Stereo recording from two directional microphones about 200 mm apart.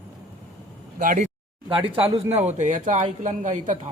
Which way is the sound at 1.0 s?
40° right (ahead or behind).